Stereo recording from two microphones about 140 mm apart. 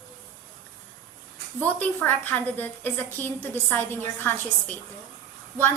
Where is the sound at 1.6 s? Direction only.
10° left (ahead or behind).